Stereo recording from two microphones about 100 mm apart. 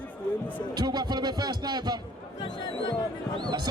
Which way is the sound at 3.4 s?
45° right (ahead or behind).